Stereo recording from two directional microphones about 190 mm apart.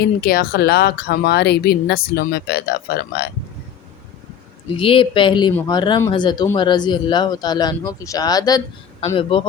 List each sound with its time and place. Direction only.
0.0 s speech: 55° left (ahead or behind)
4.8 s speech: 30° left (ahead or behind)